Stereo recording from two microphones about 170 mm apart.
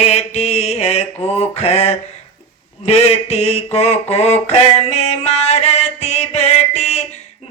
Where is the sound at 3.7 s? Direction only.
40° left (ahead or behind).